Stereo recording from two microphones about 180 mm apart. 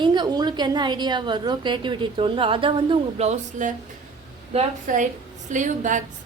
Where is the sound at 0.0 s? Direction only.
25° right (ahead or behind).